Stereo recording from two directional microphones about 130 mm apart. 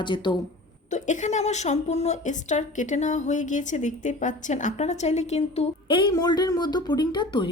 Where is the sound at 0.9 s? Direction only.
70° left (ahead or behind).